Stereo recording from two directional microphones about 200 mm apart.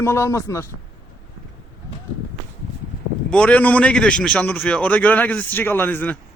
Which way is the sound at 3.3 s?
5° left (ahead or behind).